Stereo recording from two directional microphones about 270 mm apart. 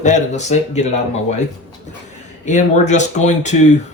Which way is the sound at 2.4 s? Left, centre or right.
Left.